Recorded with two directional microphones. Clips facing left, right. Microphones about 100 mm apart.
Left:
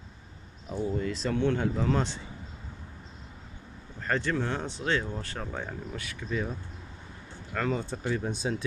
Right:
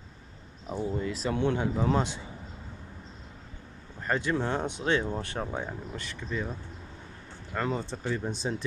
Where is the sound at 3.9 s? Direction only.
10° right (ahead or behind).